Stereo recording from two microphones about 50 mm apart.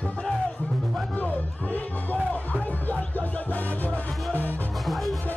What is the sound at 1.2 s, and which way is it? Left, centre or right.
Music, left.